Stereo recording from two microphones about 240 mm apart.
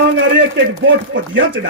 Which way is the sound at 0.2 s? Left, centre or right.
Right.